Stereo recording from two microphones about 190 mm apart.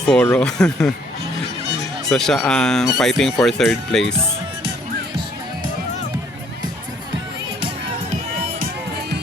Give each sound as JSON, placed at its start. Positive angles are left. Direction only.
{"t": 0.1, "sound": "speech", "side_deg": 5}
{"t": 2.0, "sound": "speech", "side_deg": 0}
{"t": 8.5, "sound": "music", "side_deg": -50}